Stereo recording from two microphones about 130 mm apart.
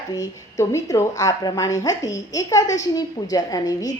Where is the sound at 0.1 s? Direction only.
25° left (ahead or behind).